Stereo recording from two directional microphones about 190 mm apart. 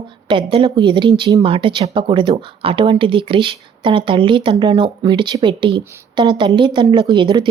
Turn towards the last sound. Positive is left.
turn(degrees=-25)  # may be behind; listen again after turning